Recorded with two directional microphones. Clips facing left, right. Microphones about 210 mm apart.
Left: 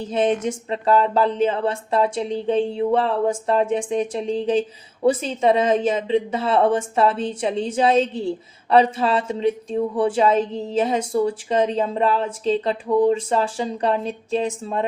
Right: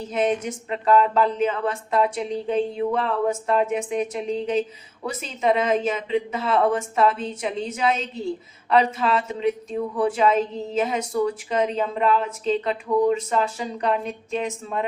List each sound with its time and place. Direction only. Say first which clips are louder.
0.1 s a woman's voice: left 3 dB; 30° left (ahead or behind)